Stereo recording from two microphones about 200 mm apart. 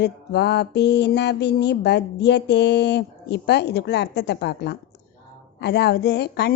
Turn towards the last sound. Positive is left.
turn(degrees=55)  # may be behind; listen again after turning